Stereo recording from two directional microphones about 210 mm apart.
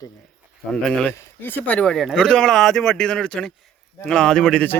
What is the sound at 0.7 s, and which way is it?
Speech, 5° left (ahead or behind).